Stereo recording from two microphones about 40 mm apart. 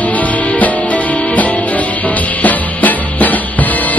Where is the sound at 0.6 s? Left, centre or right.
Left.